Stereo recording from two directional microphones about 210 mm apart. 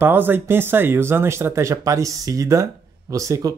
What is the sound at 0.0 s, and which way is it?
Speech, 10° right (ahead or behind).